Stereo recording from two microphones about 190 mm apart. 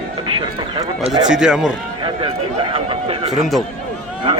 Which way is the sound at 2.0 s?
25° right (ahead or behind).